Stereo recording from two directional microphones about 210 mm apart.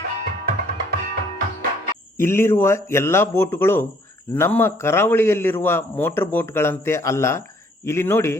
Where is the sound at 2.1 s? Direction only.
10° left (ahead or behind).